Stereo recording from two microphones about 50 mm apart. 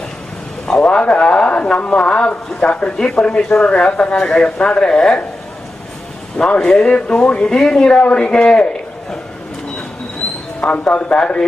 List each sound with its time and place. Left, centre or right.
0.6 s a sound: centre
0.9 s speech: left
6.6 s speech: centre
7.9 s speech: left
10.6 s speech: left